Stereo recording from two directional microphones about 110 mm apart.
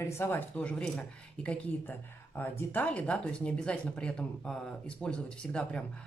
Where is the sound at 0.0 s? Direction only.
20° left (ahead or behind).